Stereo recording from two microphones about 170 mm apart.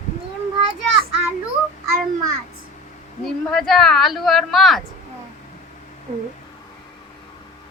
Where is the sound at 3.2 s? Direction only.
Centre (ahead or behind).